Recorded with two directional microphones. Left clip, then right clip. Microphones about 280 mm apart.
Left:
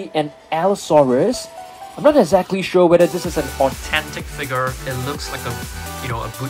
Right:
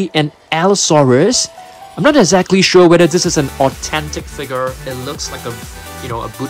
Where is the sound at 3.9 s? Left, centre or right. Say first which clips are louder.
Right 1 dB; centre.